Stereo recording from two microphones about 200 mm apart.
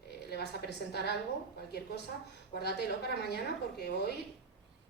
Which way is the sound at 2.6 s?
55° left (ahead or behind).